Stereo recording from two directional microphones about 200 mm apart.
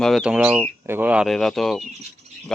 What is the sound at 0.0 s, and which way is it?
Speech, centre (ahead or behind).